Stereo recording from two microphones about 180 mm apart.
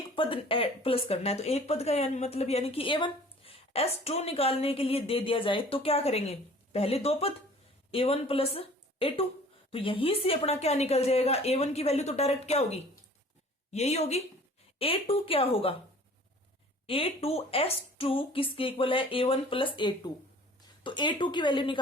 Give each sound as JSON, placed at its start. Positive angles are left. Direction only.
{"t": 0.2, "sound": "speech", "side_deg": 30}
{"t": 16.8, "sound": "a woman's voice", "side_deg": 30}